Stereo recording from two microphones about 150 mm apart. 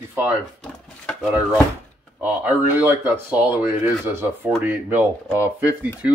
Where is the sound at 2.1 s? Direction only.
10° right (ahead or behind).